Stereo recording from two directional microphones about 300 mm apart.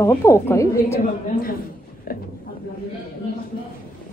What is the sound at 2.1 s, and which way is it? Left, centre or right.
Speech, left.